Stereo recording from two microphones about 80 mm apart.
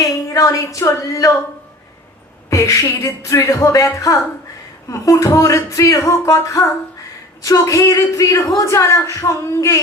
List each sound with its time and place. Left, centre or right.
0.0 s a woman's voice: left
2.5 s a sound: left
7.4 s a woman's voice: left